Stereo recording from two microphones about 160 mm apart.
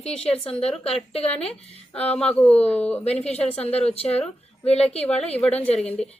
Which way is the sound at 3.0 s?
40° left (ahead or behind).